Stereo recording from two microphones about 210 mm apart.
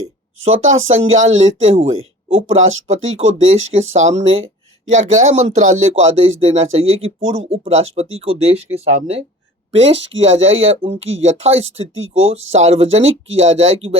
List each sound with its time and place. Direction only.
0.0 s speech: 70° right (ahead or behind)
4.9 s speech: 30° right (ahead or behind)
6.1 s speech: 70° right (ahead or behind)
7.4 s speech: 25° right (ahead or behind)
7.7 s speech: 70° right (ahead or behind)
8.2 s speech: 30° right (ahead or behind)
9.7 s speech: 60° right (ahead or behind)
12.3 s speech: 30° right (ahead or behind)